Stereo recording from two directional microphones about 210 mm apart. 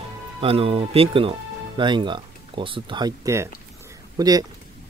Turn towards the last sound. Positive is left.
turn(degrees=-20)  # may be behind; listen again after turning